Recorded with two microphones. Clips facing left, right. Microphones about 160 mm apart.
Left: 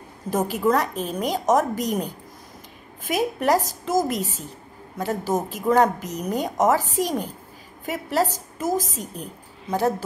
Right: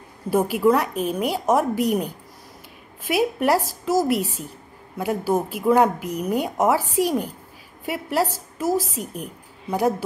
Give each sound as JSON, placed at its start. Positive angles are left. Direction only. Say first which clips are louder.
{"t": 0.3, "sound": "speech", "louder": "right 3 dB", "side_deg": -10}
{"t": 3.1, "sound": "a woman's voice", "louder": "right 1 dB", "side_deg": -5}